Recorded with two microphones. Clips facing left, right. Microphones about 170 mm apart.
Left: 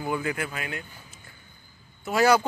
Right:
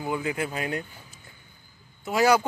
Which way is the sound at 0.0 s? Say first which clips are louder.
Even; 15° right (ahead or behind).